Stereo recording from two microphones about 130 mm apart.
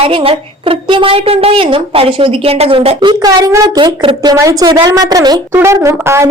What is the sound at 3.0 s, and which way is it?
Speech, 30° right (ahead or behind).